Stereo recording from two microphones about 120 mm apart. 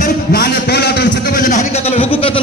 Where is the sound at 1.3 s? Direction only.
85° left; by 2.4 s 50° left (ahead or behind).